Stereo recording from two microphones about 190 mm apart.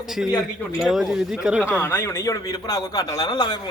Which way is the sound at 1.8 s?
10° left (ahead or behind).